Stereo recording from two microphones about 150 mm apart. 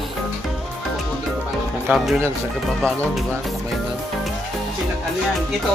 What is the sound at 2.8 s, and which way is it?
Speech, centre (ahead or behind).